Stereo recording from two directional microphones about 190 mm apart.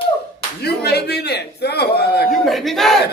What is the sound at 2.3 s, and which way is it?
Speech, centre (ahead or behind).